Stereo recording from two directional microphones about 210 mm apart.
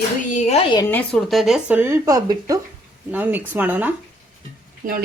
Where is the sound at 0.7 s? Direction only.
15° left (ahead or behind); by 3.9 s 10° right (ahead or behind).